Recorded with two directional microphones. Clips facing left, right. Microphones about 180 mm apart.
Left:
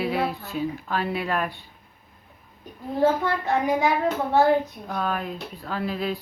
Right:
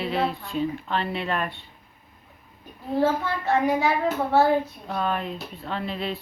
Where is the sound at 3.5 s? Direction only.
15° left (ahead or behind).